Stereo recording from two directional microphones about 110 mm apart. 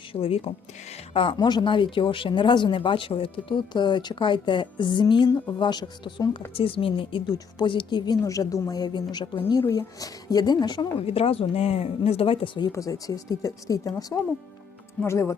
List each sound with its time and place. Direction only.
0.1 s speech: 60° left (ahead or behind)
1.1 s speech: 50° left (ahead or behind)
6.5 s speech: 55° left (ahead or behind)
9.6 s speech: 30° left (ahead or behind)
11.0 s speech: 65° left (ahead or behind)
12.6 s speech: 30° left (ahead or behind)